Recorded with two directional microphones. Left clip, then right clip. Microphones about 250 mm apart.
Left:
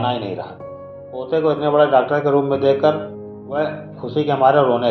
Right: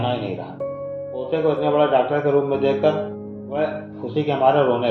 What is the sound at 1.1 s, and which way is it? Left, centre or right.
Speech, left.